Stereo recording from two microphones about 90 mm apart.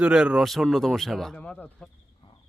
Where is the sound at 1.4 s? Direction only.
15° left (ahead or behind).